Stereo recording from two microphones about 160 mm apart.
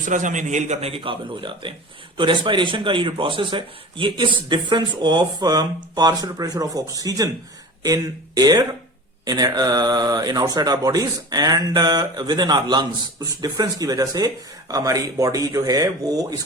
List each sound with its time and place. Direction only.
0.0 s a man's voice: 50° right (ahead or behind); by 16.4 s 25° right (ahead or behind)